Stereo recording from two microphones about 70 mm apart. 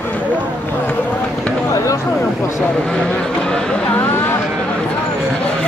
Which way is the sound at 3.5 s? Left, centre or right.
Centre.